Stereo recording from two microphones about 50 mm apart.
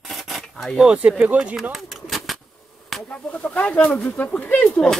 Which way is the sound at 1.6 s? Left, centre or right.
Centre.